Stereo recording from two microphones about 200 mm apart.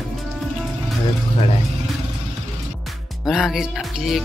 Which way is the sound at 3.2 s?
Centre (ahead or behind).